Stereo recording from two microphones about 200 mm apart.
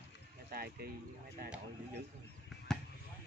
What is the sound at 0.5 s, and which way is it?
Speech, 50° right (ahead or behind).